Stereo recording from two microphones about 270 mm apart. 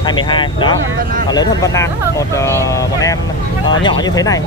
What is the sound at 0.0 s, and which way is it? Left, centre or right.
Speech, centre.